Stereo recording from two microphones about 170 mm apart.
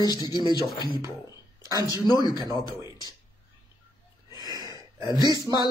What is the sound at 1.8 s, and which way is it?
Speech, 20° left (ahead or behind).